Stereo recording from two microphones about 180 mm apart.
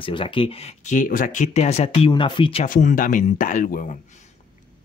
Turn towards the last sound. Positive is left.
turn(degrees=45)  # may be behind; listen again after turning